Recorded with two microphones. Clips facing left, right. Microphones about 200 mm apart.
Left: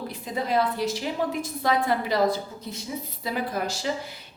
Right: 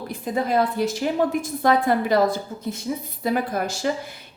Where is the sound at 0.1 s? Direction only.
50° right (ahead or behind).